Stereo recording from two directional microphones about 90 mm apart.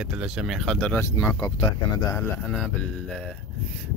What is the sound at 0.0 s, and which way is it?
Speech, 5° right (ahead or behind).